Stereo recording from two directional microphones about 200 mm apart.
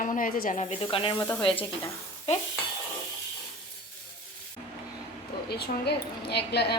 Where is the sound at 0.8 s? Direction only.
25° left (ahead or behind).